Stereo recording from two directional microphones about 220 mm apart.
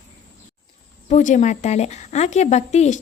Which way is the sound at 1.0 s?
35° left (ahead or behind).